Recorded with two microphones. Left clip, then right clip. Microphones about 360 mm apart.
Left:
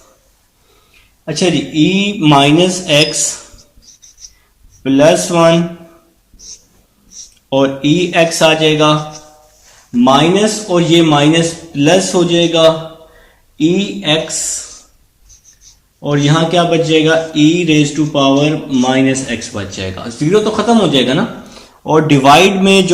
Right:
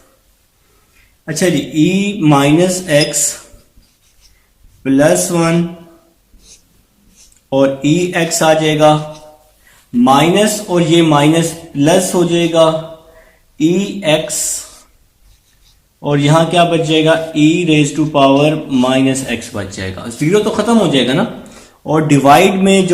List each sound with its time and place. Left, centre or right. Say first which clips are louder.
1.2 s a man's voice: left 1 dB; centre
4.8 s a man's voice: left 2 dB; centre
7.5 s a man's voice: even; centre
10.0 s a man's voice: even; centre
16.0 s a man's voice: right 1 dB; centre